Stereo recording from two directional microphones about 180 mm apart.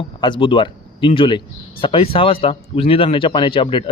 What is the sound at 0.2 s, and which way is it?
A man's voice, 25° left (ahead or behind).